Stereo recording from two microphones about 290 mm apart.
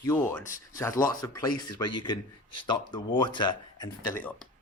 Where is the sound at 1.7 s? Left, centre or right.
Left.